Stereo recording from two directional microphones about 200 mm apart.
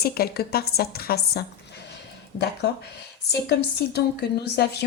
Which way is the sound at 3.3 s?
55° left (ahead or behind).